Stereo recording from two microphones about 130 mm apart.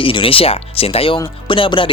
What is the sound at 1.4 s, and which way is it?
Music, 40° left (ahead or behind).